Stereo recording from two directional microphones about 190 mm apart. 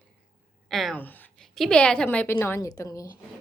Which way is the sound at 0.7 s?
Centre (ahead or behind).